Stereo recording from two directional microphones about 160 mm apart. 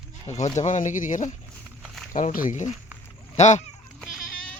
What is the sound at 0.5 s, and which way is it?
Speech, 50° left (ahead or behind).